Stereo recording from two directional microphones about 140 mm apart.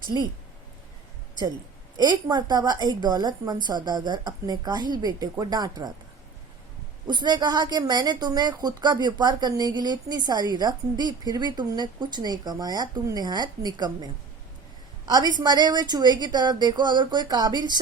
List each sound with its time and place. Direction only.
2.0 s a woman's voice: 30° right (ahead or behind)
7.1 s a woman's voice: 30° right (ahead or behind)